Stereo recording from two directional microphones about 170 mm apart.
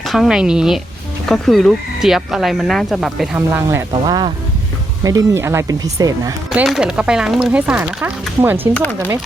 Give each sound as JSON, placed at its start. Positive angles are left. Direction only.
{"t": 0.0, "sound": "speech", "side_deg": 0}
{"t": 3.3, "sound": "speech", "side_deg": -15}
{"t": 4.0, "sound": "speech", "side_deg": -25}
{"t": 6.5, "sound": "speech", "side_deg": -5}